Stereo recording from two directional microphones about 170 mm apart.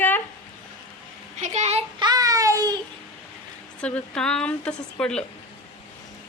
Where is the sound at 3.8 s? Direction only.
5° left (ahead or behind).